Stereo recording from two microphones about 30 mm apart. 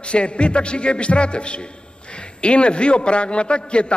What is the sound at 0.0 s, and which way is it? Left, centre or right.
A man's voice, left.